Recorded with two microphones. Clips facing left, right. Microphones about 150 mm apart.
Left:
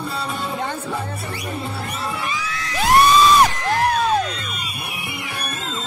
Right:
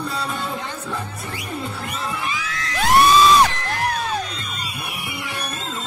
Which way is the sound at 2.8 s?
Centre (ahead or behind).